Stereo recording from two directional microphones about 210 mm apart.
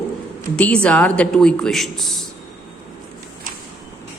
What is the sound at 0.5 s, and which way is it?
Speech, 5° left (ahead or behind).